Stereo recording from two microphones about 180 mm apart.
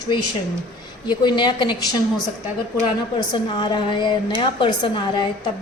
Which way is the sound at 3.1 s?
25° left (ahead or behind).